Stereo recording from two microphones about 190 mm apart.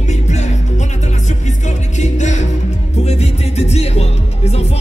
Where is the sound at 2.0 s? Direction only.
40° left (ahead or behind).